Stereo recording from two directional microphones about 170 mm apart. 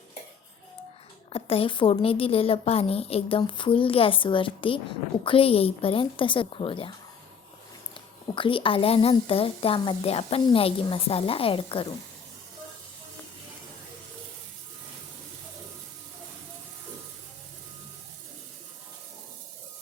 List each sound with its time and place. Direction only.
1.3 s a woman's voice: 35° left (ahead or behind)
7.9 s a woman's voice: 30° left (ahead or behind)